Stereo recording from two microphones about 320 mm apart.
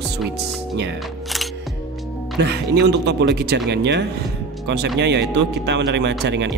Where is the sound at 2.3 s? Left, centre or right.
Right.